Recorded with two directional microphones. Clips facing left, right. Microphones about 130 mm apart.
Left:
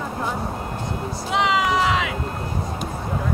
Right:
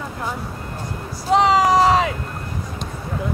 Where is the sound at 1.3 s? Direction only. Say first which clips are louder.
Right 6 dB; 40° right (ahead or behind).